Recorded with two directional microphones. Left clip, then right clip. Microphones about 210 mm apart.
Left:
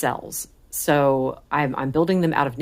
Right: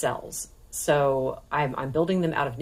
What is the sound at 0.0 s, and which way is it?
Speech, 40° left (ahead or behind).